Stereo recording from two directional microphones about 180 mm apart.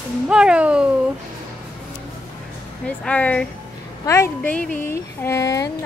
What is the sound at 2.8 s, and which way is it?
Speech, 10° left (ahead or behind).